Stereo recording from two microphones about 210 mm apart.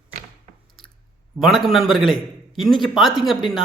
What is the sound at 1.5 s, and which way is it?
Speech, centre (ahead or behind).